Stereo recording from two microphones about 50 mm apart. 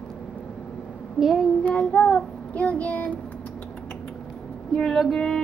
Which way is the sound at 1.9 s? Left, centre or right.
Left.